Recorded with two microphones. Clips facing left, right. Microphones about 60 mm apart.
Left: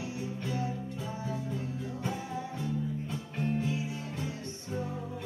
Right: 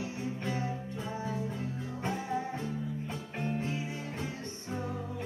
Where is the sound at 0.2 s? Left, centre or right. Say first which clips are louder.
Even; right.